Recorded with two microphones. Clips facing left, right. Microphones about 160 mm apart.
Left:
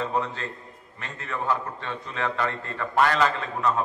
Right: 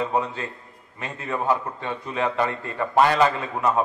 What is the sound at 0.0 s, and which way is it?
A man's voice, 15° right (ahead or behind).